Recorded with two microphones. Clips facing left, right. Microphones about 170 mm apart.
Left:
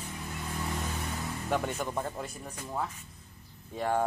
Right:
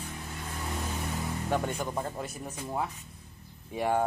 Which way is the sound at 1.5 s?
Centre (ahead or behind).